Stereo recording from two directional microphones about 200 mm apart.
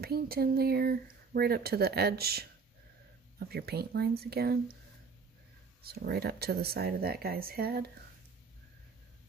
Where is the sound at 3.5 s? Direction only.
50° right (ahead or behind).